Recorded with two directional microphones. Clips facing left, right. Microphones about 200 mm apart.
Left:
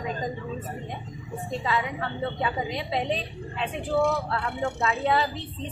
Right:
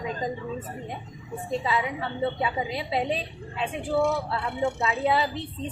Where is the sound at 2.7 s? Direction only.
5° right (ahead or behind).